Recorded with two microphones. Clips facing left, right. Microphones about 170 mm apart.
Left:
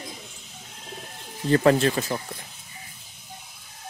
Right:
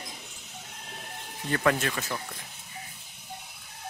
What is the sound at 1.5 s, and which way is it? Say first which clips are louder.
Speech: left 8 dB; 30° left (ahead or behind).